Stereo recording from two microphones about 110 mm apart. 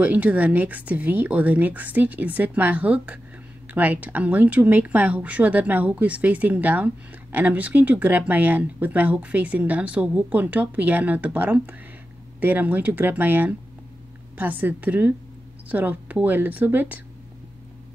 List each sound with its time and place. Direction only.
0.0 s speech: 15° right (ahead or behind)